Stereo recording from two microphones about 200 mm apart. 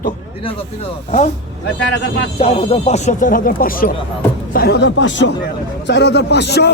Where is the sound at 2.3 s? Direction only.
30° left (ahead or behind).